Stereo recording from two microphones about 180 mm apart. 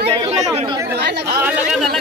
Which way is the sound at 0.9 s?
60° right (ahead or behind).